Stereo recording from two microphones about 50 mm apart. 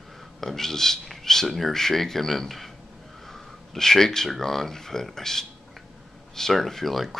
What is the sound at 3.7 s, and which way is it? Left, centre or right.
Speech, centre.